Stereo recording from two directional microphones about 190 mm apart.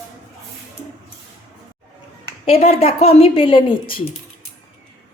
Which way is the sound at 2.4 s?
30° left (ahead or behind).